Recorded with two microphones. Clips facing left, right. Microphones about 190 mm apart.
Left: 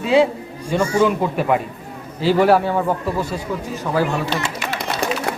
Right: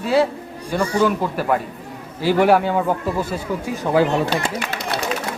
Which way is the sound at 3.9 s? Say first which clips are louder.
Right 3 dB; 20° right (ahead or behind).